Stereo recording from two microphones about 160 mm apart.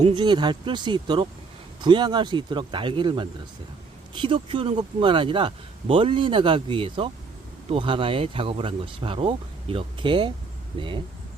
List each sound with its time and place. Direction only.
0.2 s speech: 25° right (ahead or behind)